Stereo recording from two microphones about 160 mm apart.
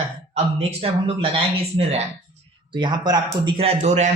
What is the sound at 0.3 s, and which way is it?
Speech, 35° right (ahead or behind).